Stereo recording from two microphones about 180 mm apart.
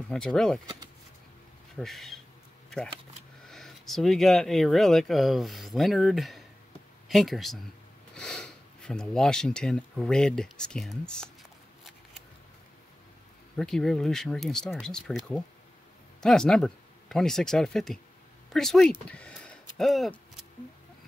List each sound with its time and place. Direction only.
0.1 s speech: 5° left (ahead or behind)
1.8 s speech: centre (ahead or behind)
3.4 s speech: centre (ahead or behind)
13.6 s speech: 5° left (ahead or behind)